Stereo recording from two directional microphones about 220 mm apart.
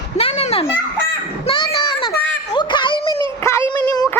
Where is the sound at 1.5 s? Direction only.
20° left (ahead or behind).